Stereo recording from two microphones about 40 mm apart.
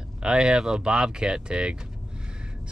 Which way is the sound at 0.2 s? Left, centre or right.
Right.